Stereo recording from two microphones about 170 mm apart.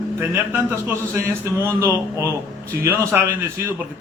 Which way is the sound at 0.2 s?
10° right (ahead or behind).